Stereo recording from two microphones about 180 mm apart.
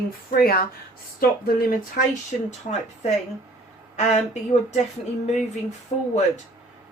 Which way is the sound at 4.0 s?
40° left (ahead or behind).